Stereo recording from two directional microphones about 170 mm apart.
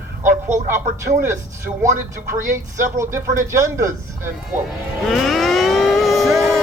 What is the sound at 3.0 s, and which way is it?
Speech, 15° right (ahead or behind).